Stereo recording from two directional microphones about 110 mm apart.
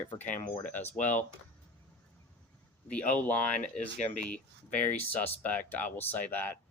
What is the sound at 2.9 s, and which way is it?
Speech, 15° left (ahead or behind).